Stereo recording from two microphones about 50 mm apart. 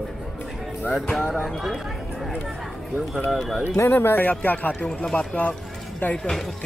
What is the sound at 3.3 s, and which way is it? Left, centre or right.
Speech, centre.